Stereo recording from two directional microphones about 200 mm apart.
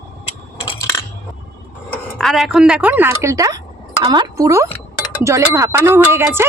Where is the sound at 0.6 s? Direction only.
20° left (ahead or behind).